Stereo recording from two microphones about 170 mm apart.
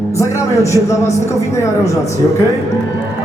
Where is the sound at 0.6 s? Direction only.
15° left (ahead or behind).